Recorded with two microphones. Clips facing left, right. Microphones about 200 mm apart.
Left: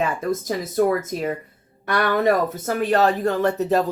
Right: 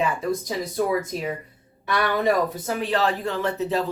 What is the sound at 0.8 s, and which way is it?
Speech, 50° left (ahead or behind).